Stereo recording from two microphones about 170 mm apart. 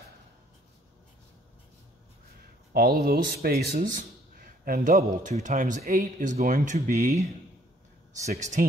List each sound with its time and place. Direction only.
2.7 s speech: 65° right (ahead or behind); by 7.2 s 50° right (ahead or behind)
8.3 s speech: 45° right (ahead or behind)